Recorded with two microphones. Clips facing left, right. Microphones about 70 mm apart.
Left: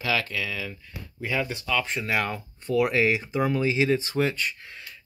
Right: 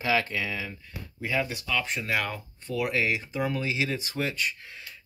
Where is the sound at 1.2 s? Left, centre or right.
Centre.